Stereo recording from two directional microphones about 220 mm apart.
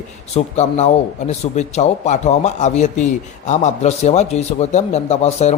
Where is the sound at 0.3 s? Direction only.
30° left (ahead or behind).